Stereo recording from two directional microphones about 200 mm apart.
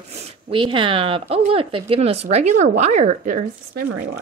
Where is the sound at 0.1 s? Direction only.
30° right (ahead or behind).